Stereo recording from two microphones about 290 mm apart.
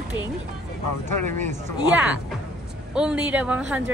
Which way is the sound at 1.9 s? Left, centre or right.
Centre.